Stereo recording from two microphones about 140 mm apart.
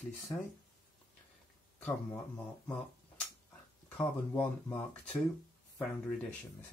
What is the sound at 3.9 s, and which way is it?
Speech, 15° left (ahead or behind).